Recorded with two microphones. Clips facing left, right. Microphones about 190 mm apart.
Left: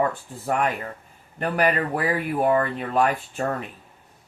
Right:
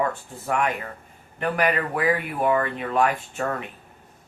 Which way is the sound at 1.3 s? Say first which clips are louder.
Left 1 dB; 40° left (ahead or behind).